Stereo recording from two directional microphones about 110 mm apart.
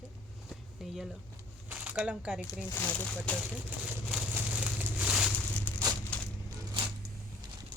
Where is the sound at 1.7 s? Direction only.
10° right (ahead or behind).